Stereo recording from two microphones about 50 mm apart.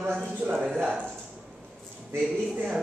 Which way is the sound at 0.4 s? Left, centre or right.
Right.